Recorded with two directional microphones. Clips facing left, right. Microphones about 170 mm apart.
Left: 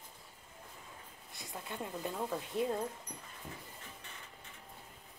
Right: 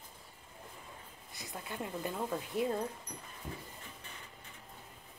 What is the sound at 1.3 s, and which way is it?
Speech, centre (ahead or behind).